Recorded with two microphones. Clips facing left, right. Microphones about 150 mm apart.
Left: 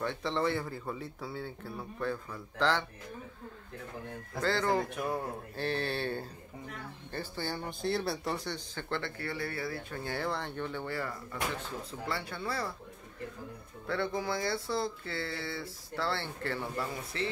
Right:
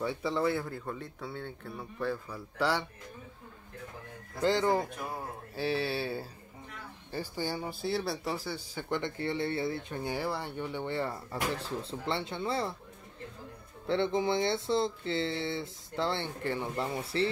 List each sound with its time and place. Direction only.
0.0 s speech: 5° right (ahead or behind)
4.4 s speech: 15° right (ahead or behind)
5.6 s speech: 5° right (ahead or behind); by 12.7 s 25° right (ahead or behind)
13.8 s speech: 25° right (ahead or behind)